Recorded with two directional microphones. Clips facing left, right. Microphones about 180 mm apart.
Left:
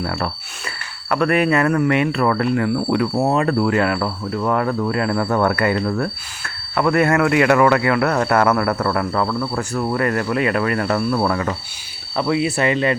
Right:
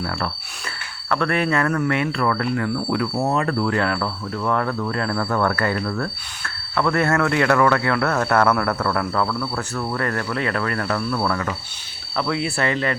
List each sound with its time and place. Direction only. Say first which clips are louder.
1.1 s speech: left 4 dB; 15° left (ahead or behind)
4.7 s cricket: left 4 dB; 15° left (ahead or behind)
6.7 s speech: left 3 dB; 15° left (ahead or behind)
9.3 s cricket: left 4 dB; 15° left (ahead or behind)